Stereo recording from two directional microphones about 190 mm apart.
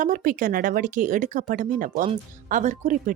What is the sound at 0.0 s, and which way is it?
Speech, 45° right (ahead or behind).